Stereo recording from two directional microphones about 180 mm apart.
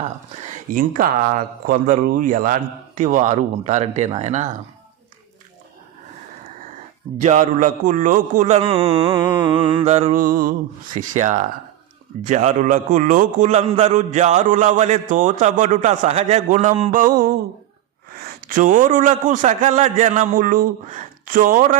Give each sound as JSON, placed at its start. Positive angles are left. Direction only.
{"t": 0.3, "sound": "speech", "side_deg": -45}
{"t": 7.2, "sound": "a man's voice", "side_deg": -40}
{"t": 18.4, "sound": "speech", "side_deg": -45}